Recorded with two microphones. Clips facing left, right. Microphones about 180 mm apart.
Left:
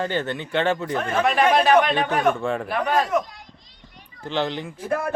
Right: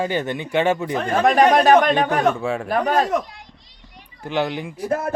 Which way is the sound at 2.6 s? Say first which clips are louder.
Right 5 dB; 40° right (ahead or behind).